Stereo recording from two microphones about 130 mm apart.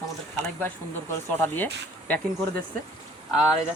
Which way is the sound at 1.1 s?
15° left (ahead or behind).